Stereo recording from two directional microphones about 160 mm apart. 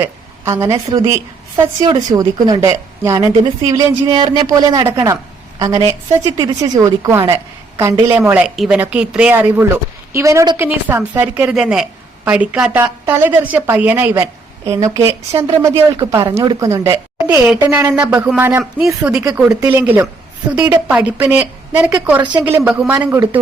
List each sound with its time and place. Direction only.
0.0 s a sound: 20° right (ahead or behind)
0.9 s a woman's voice: 20° right (ahead or behind)
19.5 s a woman's voice: 15° right (ahead or behind)